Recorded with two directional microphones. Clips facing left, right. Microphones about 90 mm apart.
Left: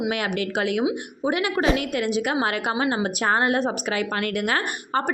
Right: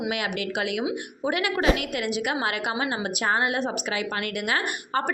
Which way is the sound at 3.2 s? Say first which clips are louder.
Left 3 dB; 45° left (ahead or behind).